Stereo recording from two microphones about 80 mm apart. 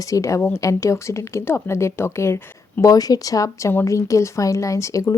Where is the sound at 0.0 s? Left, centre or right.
Left.